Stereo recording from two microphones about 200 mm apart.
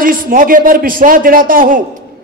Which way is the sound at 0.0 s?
45° right (ahead or behind).